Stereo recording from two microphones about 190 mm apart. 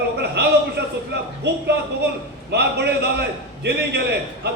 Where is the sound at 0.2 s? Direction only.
60° right (ahead or behind).